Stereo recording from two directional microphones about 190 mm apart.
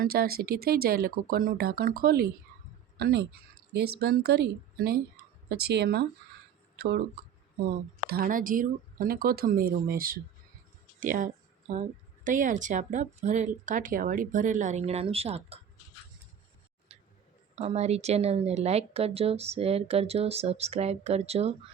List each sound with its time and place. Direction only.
0.0 s speech: 55° right (ahead or behind)
7.6 s a woman's voice: 50° right (ahead or behind); by 15.6 s 30° right (ahead or behind)
16.9 s a sound: 30° right (ahead or behind)
17.5 s a woman's voice: 35° right (ahead or behind)